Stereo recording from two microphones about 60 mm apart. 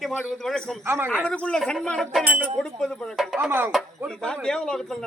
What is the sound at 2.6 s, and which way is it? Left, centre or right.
Speech, centre.